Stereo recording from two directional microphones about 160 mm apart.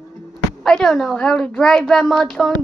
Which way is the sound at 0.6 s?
Centre (ahead or behind).